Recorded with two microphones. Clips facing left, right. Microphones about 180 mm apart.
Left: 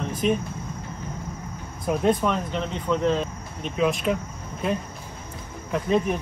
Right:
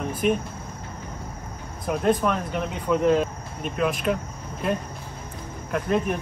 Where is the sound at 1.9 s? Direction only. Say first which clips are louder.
Even; 5° right (ahead or behind).